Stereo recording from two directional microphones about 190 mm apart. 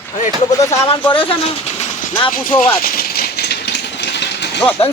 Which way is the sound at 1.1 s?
25° left (ahead or behind).